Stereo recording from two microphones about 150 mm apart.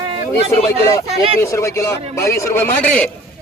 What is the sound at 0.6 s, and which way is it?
A man's voice, 20° left (ahead or behind).